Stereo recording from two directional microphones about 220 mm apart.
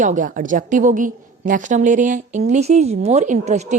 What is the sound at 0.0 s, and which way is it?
A woman's voice, 35° right (ahead or behind).